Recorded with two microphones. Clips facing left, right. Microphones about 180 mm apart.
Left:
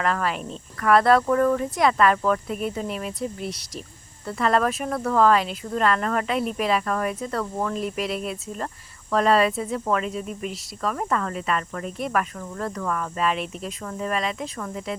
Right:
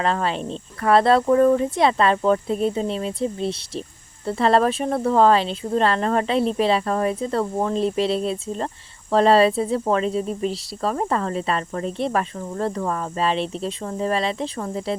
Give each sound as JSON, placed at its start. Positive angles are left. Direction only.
{"t": 0.0, "sound": "speech", "side_deg": -25}